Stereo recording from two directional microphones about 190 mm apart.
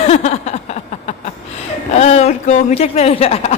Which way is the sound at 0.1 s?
35° left (ahead or behind).